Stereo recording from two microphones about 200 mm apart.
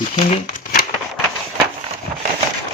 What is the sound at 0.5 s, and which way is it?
Crumpling, 40° left (ahead or behind).